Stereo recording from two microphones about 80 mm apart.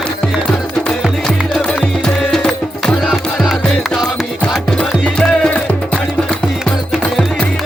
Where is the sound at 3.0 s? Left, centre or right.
Centre.